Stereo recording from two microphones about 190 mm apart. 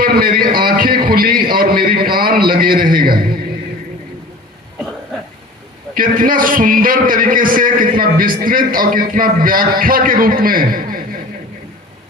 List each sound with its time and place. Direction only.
0.0 s a man's voice: 50° right (ahead or behind)
1.0 s a sound: 50° right (ahead or behind)
5.9 s a man's voice: 45° right (ahead or behind)